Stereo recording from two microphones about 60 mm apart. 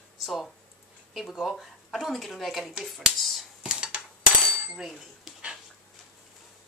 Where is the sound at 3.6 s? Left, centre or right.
Centre.